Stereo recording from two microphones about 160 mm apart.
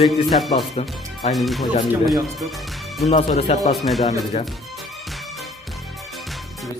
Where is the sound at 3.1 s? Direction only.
45° left (ahead or behind).